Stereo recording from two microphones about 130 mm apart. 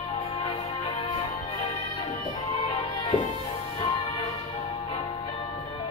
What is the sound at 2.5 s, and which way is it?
Music, 45° left (ahead or behind).